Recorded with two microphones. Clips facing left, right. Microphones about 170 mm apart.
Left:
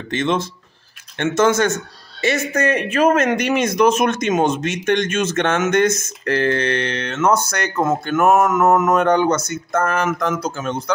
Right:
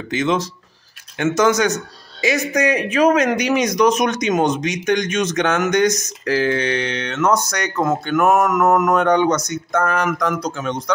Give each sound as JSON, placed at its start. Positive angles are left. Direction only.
{"t": 0.1, "sound": "a man's voice", "side_deg": 0}